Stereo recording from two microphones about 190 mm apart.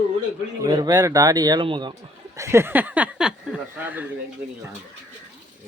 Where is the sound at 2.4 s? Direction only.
15° right (ahead or behind).